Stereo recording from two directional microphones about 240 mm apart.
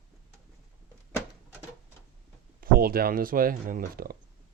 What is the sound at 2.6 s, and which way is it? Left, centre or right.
Speech, right.